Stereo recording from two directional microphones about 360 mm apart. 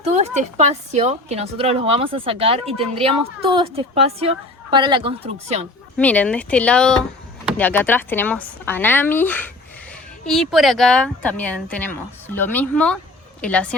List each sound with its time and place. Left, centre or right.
0.2 s speech: centre
6.0 s speech: centre